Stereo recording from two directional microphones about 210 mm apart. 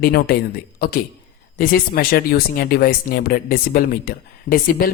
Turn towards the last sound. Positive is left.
turn(degrees=45)  # may be behind; listen again after turning